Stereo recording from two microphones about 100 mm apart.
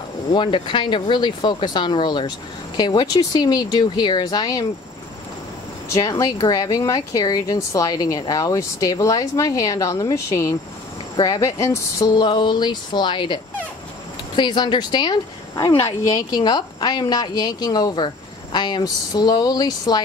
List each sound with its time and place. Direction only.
0.3 s speech: 50° left (ahead or behind)
5.9 s speech: 35° left (ahead or behind)
11.1 s speech: 45° left (ahead or behind)
11.4 s speech: 35° left (ahead or behind)
12.1 s speech: 50° left (ahead or behind)